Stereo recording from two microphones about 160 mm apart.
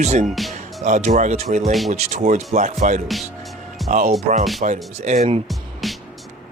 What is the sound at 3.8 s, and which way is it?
Music, centre (ahead or behind).